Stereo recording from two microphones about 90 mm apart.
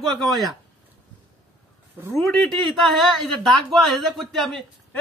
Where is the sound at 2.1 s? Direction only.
15° left (ahead or behind).